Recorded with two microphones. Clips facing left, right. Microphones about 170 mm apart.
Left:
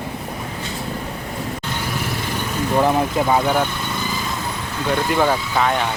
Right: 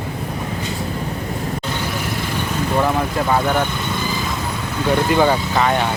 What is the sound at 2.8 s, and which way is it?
Speech, 20° left (ahead or behind).